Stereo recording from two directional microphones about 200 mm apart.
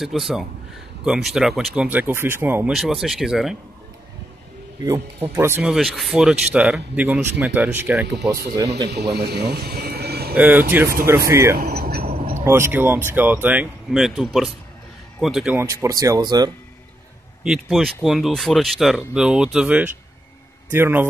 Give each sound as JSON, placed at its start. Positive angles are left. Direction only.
{"t": 0.0, "sound": "speech", "side_deg": 0}
{"t": 5.3, "sound": "speech", "side_deg": -10}
{"t": 8.6, "sound": "a man's voice", "side_deg": -60}
{"t": 10.3, "sound": "speech", "side_deg": -10}
{"t": 11.5, "sound": "a sound", "side_deg": -50}
{"t": 12.4, "sound": "speech", "side_deg": -10}
{"t": 15.7, "sound": "speech", "side_deg": -15}
{"t": 17.4, "sound": "speech", "side_deg": 0}